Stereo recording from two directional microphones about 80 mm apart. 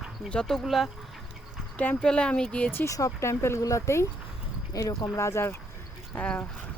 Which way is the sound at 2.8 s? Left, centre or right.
Left.